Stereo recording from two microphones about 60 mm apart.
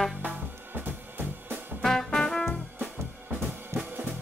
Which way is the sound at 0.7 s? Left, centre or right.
Right.